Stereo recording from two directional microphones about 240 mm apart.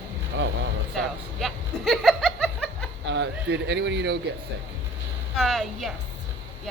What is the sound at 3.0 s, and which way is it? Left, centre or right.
Speech, right.